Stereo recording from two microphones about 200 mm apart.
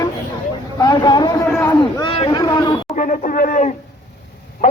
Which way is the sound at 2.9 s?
40° left (ahead or behind).